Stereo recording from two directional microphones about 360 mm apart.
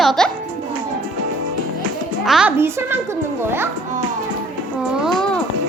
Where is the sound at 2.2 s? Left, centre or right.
Centre.